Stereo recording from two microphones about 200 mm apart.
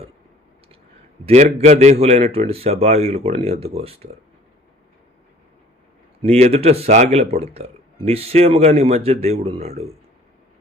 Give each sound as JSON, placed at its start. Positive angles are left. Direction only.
{"t": 1.2, "sound": "speech", "side_deg": -35}
{"t": 6.2, "sound": "speech", "side_deg": -30}